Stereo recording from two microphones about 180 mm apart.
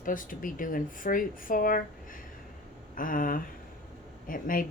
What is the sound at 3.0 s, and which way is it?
A woman's voice, 50° left (ahead or behind).